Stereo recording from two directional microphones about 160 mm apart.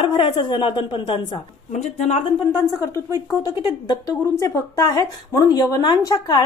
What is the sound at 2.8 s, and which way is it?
A woman's voice, 20° left (ahead or behind).